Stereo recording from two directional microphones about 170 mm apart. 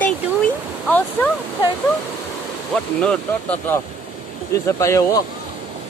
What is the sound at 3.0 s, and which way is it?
Speech, 5° left (ahead or behind).